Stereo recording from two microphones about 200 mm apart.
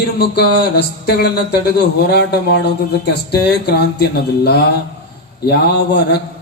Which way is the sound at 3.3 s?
55° left (ahead or behind).